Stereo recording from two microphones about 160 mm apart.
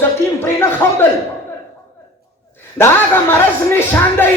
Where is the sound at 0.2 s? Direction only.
20° left (ahead or behind).